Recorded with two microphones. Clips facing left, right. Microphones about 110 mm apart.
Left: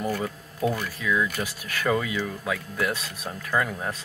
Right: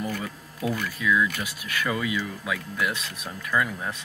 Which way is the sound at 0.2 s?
30° left (ahead or behind).